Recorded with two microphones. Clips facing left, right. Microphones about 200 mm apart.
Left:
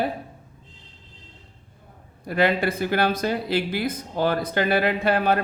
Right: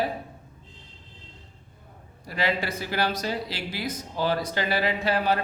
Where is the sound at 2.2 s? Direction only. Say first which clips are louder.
Left 6 dB; 55° left (ahead or behind).